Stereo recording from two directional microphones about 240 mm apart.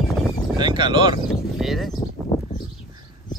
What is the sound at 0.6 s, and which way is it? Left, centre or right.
Speech, centre.